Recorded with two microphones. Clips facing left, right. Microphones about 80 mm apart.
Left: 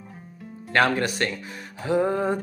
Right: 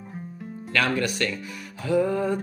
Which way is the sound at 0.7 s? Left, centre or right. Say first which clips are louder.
Left 3 dB; left.